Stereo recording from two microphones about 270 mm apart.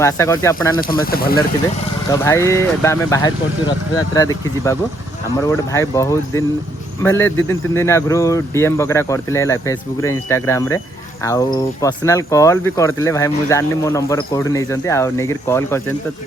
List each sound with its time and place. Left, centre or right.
0.0 s speech: centre
0.8 s speech: left
2.0 s speech: centre